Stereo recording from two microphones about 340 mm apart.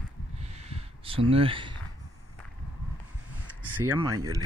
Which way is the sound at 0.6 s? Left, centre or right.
Centre.